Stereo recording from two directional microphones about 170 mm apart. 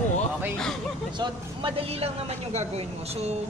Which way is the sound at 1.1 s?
25° right (ahead or behind).